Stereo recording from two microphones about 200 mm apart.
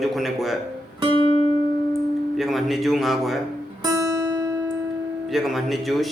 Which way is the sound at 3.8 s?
15° right (ahead or behind).